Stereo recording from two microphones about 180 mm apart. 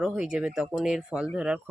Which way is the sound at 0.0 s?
Centre (ahead or behind).